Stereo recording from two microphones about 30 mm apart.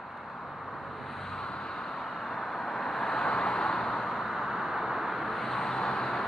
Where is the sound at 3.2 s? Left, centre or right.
Left.